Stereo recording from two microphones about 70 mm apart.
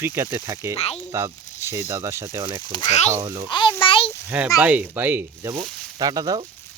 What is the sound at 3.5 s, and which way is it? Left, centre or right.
Speech, left.